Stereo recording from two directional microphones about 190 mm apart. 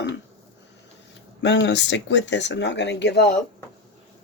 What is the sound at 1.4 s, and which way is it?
Speech, 70° left (ahead or behind).